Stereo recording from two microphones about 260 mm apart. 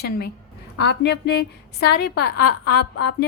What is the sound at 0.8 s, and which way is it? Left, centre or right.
A woman's voice, left.